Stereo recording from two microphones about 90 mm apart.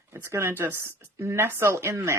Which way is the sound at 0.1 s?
30° right (ahead or behind).